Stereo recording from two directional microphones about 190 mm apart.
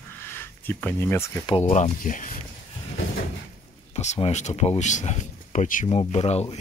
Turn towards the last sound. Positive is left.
turn(degrees=35)  # may be behind; listen again after turning